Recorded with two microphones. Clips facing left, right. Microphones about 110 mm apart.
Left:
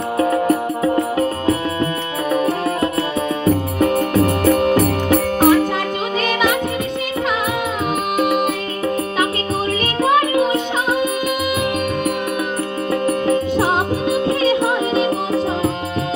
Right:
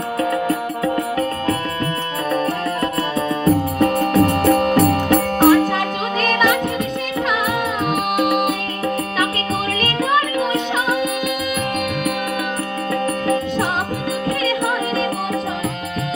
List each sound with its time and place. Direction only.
0.2 s music: 25° left (ahead or behind)
3.4 s music: 5° left (ahead or behind)
9.8 s music: centre (ahead or behind)
12.9 s music: 25° left (ahead or behind)